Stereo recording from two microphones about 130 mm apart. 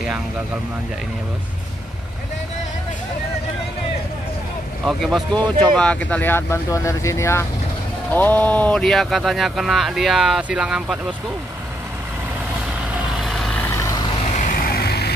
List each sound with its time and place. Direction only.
4.8 s speech: centre (ahead or behind)
13.2 s vehicle: centre (ahead or behind)
13.7 s vehicle: 20° left (ahead or behind)
14.3 s vehicle: 90° left